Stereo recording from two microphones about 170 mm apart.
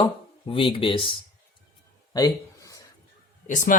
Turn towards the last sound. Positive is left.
turn(degrees=50)  # may be behind; listen again after turning